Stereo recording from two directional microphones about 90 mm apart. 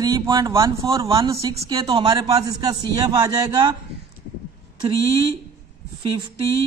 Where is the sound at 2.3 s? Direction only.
40° right (ahead or behind).